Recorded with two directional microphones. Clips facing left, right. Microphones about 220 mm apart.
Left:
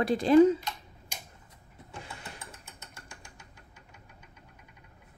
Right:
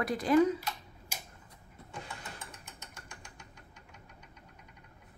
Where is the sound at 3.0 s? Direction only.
5° left (ahead or behind).